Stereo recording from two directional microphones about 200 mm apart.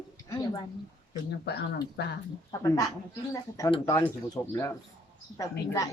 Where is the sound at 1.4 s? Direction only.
55° left (ahead or behind).